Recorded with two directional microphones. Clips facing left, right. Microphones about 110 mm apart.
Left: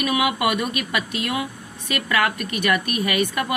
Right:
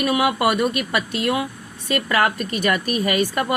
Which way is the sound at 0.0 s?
35° right (ahead or behind).